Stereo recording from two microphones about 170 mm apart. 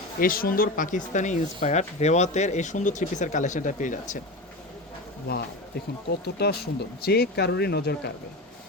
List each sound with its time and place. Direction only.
0.2 s speech: 55° left (ahead or behind)
6.1 s speech: 70° left (ahead or behind)